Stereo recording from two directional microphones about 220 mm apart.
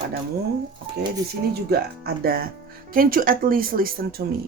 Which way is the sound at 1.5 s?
45° right (ahead or behind).